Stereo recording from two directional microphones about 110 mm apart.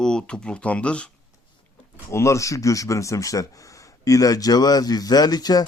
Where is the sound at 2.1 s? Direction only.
25° left (ahead or behind).